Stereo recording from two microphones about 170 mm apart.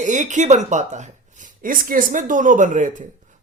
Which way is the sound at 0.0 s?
45° right (ahead or behind).